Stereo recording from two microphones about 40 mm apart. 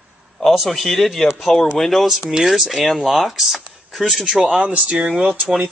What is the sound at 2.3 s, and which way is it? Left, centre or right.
Speech, centre.